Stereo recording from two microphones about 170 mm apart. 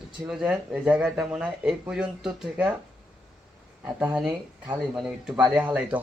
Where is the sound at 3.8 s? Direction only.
15° right (ahead or behind).